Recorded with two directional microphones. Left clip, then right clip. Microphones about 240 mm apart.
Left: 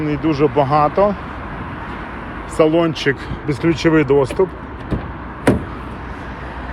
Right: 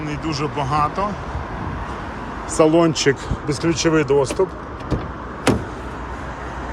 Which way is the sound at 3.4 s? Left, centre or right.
Centre.